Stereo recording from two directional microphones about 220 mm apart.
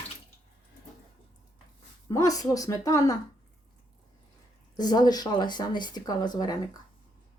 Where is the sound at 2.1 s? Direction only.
15° left (ahead or behind).